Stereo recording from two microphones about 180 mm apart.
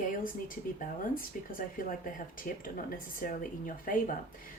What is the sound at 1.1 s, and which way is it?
Speech, 50° left (ahead or behind).